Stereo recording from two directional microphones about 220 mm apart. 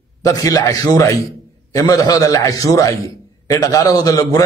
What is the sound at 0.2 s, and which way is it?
A man's voice, 15° left (ahead or behind).